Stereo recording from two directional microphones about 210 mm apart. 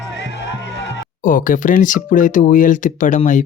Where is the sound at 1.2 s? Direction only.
40° left (ahead or behind).